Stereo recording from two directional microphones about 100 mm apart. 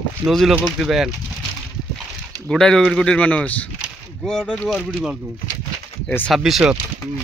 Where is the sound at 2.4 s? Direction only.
5° left (ahead or behind).